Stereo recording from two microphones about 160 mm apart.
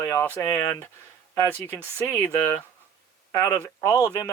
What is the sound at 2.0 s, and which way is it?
Speech, 20° left (ahead or behind).